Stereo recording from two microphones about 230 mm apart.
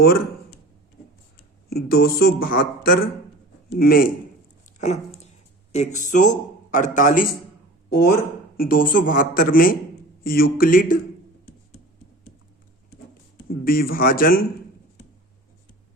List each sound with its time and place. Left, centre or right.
1.7 s speech: left
4.8 s dog: left
5.7 s speech: left
13.5 s speech: left